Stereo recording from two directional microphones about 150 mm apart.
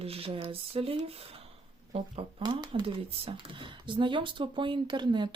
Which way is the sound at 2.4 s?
30° right (ahead or behind).